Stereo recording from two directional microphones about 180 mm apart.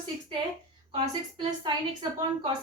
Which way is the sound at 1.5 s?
25° right (ahead or behind).